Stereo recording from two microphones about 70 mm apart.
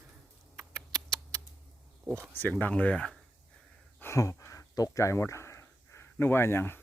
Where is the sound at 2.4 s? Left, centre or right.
Left.